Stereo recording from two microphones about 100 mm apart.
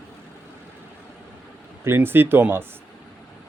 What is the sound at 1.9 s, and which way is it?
Speech, 20° right (ahead or behind).